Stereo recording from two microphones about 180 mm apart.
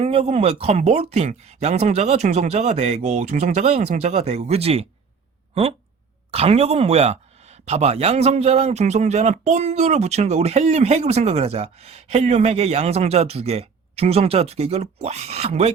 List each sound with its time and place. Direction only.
0.0 s speech: 35° right (ahead or behind)
6.3 s speech: 35° right (ahead or behind)